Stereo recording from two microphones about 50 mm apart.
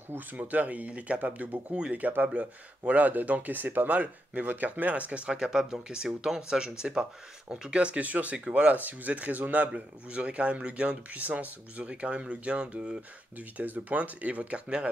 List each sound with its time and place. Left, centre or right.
0.3 s speech: right
9.7 s speech: right
13.4 s speech: right